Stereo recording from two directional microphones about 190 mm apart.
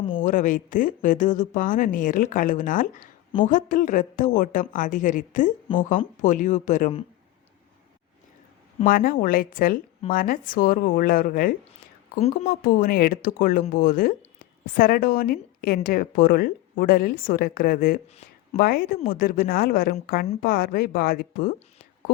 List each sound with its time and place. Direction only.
0.2 s a woman's voice: 45° left (ahead or behind)
8.8 s a woman's voice: 50° left (ahead or behind)